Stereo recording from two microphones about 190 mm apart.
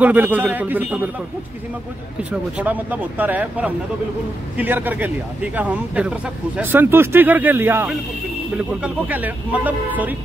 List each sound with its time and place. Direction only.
0.0 s speech: 10° right (ahead or behind)
2.5 s speech: 10° right (ahead or behind)